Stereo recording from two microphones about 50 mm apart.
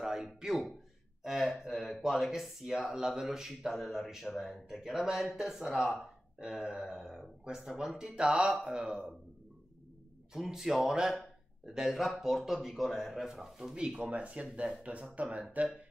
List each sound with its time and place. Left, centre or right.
0.0 s a sound: centre
1.2 s speech: centre
10.3 s speech: centre; by 15.7 s right